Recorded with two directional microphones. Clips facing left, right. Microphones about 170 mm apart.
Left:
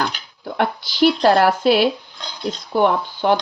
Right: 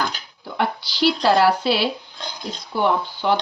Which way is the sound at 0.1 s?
55° left (ahead or behind).